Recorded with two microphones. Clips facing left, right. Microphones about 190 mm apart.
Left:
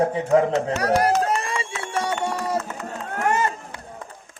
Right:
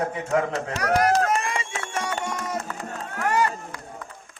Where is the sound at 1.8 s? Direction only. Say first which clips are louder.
Left 7 dB; 30° left (ahead or behind).